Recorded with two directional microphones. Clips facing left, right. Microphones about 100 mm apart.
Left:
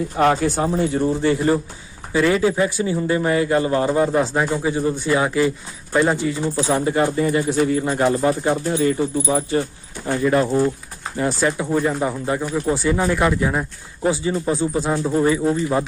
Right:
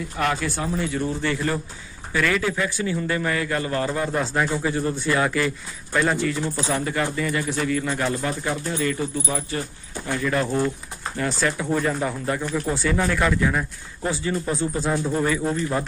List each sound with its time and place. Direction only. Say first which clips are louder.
0.2 s a man's voice: left 7 dB; 35° left (ahead or behind); by 15.5 s 15° left (ahead or behind)